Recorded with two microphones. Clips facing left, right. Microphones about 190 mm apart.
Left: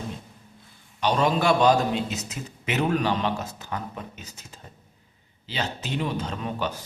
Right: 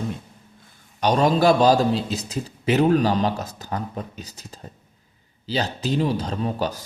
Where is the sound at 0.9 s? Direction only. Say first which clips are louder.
Right 4 dB; 40° right (ahead or behind).